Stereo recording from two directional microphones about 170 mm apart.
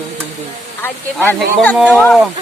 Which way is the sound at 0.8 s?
10° left (ahead or behind).